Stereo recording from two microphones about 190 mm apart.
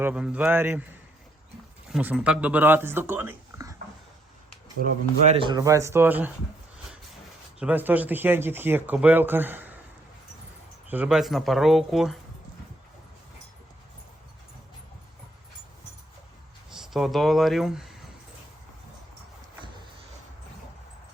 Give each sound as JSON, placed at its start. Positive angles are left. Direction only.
{"t": 0.0, "sound": "speech", "side_deg": -5}
{"t": 1.9, "sound": "speech", "side_deg": -5}
{"t": 4.8, "sound": "speech", "side_deg": -35}
{"t": 5.5, "sound": "speech", "side_deg": -20}
{"t": 7.6, "sound": "speech", "side_deg": -10}
{"t": 10.8, "sound": "speech", "side_deg": -10}
{"t": 16.7, "sound": "speech", "side_deg": 0}